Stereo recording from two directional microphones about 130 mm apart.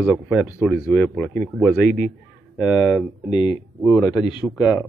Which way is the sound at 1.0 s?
15° left (ahead or behind).